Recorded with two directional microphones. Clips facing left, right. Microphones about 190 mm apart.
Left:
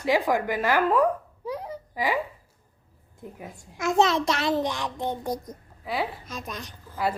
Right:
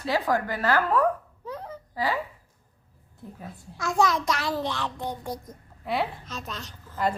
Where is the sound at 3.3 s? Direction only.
15° left (ahead or behind).